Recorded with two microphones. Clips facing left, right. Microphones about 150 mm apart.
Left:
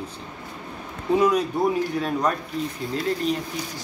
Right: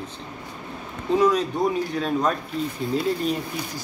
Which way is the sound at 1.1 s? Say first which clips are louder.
Even; 10° left (ahead or behind).